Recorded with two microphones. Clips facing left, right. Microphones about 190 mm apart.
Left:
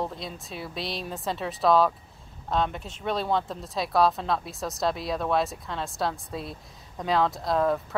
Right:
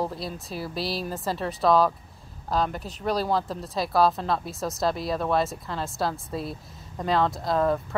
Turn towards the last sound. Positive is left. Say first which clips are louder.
# right 1 dB
turn(degrees=0)  # may be behind; listen again after turning